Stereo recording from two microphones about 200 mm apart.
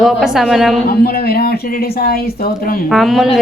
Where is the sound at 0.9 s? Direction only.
50° left (ahead or behind).